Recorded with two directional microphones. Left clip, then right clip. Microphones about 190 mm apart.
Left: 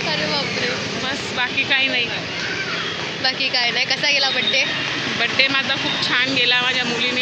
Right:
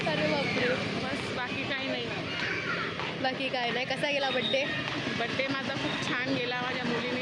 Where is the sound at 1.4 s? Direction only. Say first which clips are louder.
Left 14 dB; 5° left (ahead or behind).